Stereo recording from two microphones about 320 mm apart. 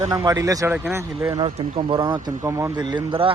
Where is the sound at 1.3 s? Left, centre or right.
Centre.